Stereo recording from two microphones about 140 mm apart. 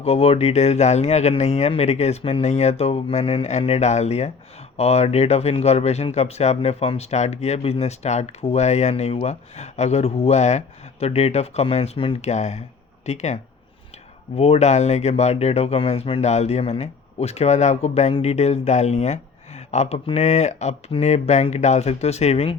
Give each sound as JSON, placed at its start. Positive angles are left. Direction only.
{"t": 0.0, "sound": "speech", "side_deg": 45}
{"t": 12.3, "sound": "speech", "side_deg": 55}